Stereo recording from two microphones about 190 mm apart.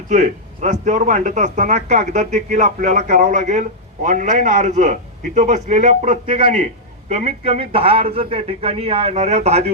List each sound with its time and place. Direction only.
0.1 s a man's voice: 40° right (ahead or behind)
6.2 s a man's voice: 30° right (ahead or behind)